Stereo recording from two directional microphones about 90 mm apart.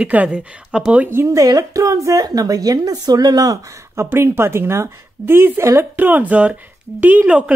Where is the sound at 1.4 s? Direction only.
40° right (ahead or behind).